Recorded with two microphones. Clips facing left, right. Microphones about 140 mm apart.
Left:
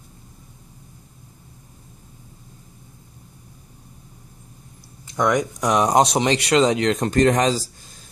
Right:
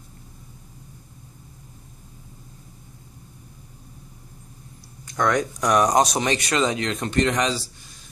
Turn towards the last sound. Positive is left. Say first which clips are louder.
# left 5 dB
turn(degrees=45)  # may be behind; listen again after turning